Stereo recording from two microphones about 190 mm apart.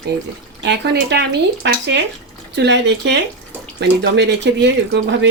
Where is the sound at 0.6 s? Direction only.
60° right (ahead or behind).